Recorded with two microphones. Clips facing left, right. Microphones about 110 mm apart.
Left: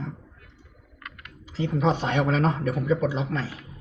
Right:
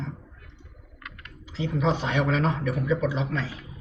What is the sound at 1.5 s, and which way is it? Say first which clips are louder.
A man's voice: left 2 dB; 45° left (ahead or behind).